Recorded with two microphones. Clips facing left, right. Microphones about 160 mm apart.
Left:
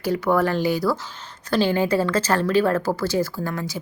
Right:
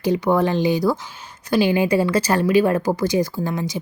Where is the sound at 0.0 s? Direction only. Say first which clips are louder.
Right 2 dB; 20° right (ahead or behind).